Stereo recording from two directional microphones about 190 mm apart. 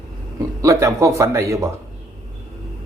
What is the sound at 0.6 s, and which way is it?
Speech, 15° right (ahead or behind).